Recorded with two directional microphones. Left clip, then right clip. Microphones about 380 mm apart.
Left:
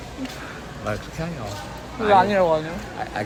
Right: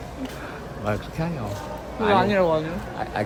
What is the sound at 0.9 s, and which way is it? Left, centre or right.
Speech, centre.